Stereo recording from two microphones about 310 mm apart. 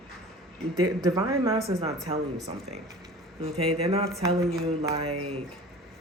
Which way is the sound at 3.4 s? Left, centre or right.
Centre.